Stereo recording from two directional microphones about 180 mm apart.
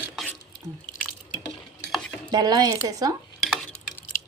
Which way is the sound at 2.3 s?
20° right (ahead or behind).